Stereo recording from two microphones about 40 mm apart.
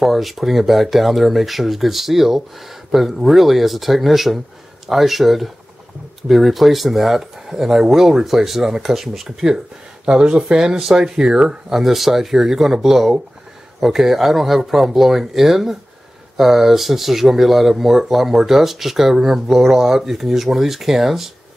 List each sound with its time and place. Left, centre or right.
0.0 s speech: centre
10.0 s speech: right
11.7 s speech: centre